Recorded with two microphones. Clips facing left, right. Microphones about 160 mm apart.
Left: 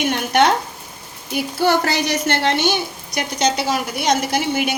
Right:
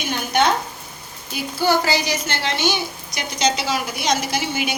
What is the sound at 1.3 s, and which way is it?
Speech, 65° left (ahead or behind).